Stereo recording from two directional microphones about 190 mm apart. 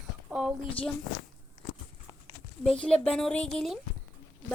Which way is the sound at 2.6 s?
5° left (ahead or behind).